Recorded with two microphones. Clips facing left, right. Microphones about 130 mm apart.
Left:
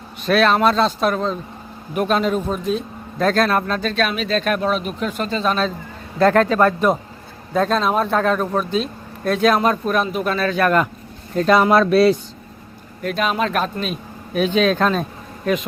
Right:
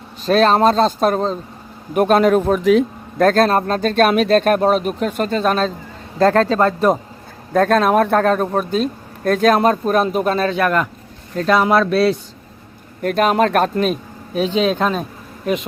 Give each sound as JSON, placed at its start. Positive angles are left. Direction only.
{"t": 0.3, "sound": "a man's voice", "side_deg": -35}
{"t": 3.2, "sound": "speech", "side_deg": -45}
{"t": 6.1, "sound": "a man's voice", "side_deg": -35}
{"t": 7.5, "sound": "speech", "side_deg": -50}
{"t": 11.3, "sound": "speech", "side_deg": 5}
{"t": 13.0, "sound": "speech", "side_deg": -50}
{"t": 14.3, "sound": "speech", "side_deg": -25}